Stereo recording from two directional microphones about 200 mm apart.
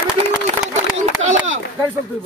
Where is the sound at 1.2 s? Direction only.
35° right (ahead or behind).